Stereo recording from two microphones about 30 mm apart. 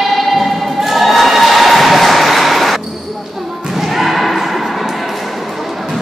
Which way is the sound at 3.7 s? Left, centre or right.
Centre.